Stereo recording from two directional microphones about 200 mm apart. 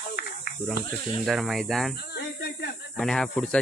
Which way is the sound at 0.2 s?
50° left (ahead or behind).